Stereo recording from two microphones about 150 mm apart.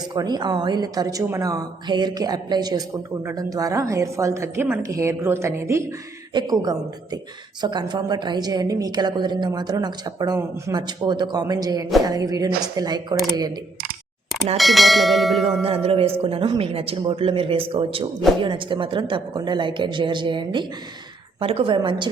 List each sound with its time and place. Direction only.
0.1 s a woman's voice: 30° right (ahead or behind)
14.6 s bell: centre (ahead or behind)
15.6 s speech: 40° right (ahead or behind)